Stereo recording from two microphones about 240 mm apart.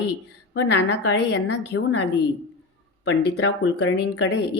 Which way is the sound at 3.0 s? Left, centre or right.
Left.